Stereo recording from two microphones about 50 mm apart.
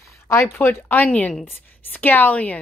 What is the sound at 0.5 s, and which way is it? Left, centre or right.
Speech, left.